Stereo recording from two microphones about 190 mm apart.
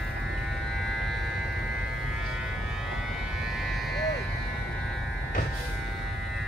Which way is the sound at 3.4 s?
Centre (ahead or behind).